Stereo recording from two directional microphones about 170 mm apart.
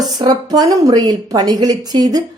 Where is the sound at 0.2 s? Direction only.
25° right (ahead or behind).